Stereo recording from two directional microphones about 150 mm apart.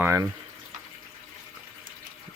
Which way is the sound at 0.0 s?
20° right (ahead or behind).